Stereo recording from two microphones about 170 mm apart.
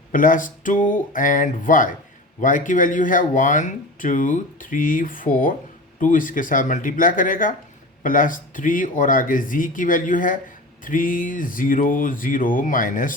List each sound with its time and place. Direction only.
0.1 s speech: 55° left (ahead or behind)